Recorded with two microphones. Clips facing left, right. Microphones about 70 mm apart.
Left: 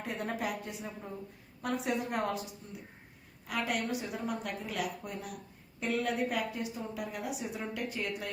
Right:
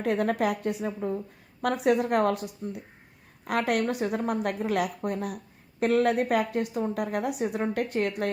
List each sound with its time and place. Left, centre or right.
0.0 s a woman's voice: right